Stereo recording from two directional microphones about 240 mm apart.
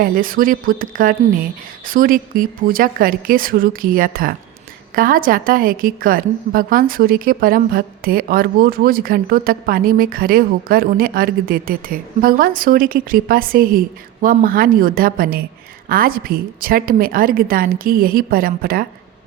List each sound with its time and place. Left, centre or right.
0.0 s a woman's voice: right